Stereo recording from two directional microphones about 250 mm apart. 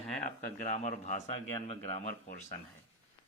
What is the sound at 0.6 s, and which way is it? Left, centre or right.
Speech, left.